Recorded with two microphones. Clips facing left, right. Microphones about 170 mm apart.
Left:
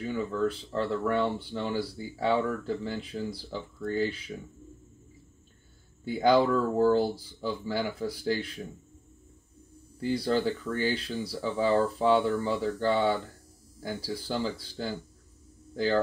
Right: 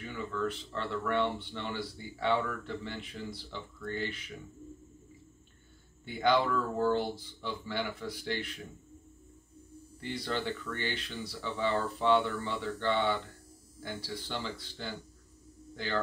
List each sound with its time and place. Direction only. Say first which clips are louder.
0.0 s speech: left 6 dB; 35° left (ahead or behind)
6.0 s speech: left 5 dB; 40° left (ahead or behind)
9.9 s speech: left 8 dB; 35° left (ahead or behind)